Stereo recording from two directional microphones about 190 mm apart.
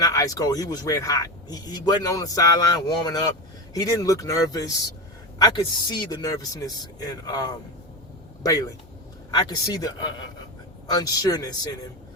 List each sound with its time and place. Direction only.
0.0 s speech: 20° left (ahead or behind)